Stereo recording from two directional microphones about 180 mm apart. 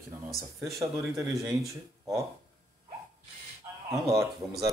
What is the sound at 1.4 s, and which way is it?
Speech, 15° right (ahead or behind).